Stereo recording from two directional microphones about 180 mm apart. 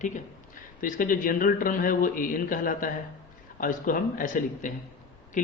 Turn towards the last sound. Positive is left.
turn(degrees=45)  # may be behind; listen again after turning